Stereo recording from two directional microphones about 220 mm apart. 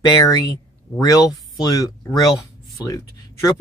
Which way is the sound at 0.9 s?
15° left (ahead or behind).